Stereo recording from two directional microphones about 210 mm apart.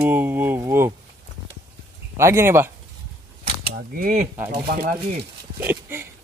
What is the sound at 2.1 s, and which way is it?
Speech, 15° right (ahead or behind).